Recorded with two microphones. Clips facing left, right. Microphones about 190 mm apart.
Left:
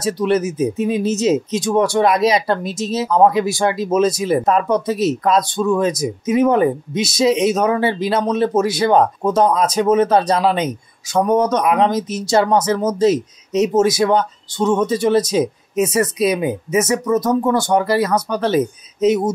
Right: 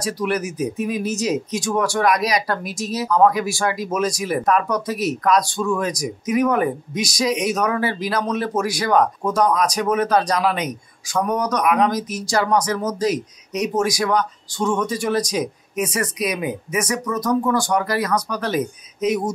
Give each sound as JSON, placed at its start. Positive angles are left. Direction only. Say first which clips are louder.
{"t": 0.0, "sound": "speech", "louder": "left 6 dB", "side_deg": 25}